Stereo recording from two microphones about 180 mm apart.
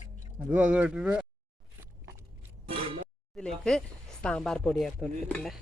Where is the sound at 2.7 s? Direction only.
30° right (ahead or behind).